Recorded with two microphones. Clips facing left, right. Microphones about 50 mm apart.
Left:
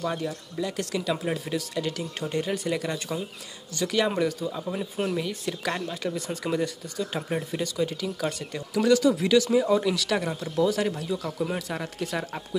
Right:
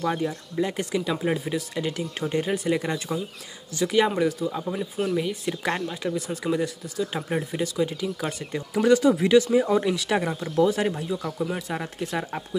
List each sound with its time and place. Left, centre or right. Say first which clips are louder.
0.0 s speech: right 3 dB; centre
0.6 s speech: right 4 dB; right
6.0 s speech: right 3 dB; centre
9.6 s speech: right 1 dB; right